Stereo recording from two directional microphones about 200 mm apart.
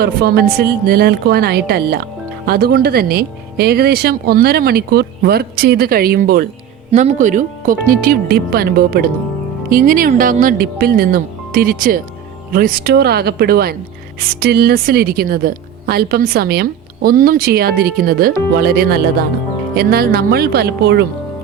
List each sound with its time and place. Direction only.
0.0 s a woman's voice: 50° right (ahead or behind)
6.9 s a woman's voice: 40° right (ahead or behind); by 21.1 s 55° right (ahead or behind)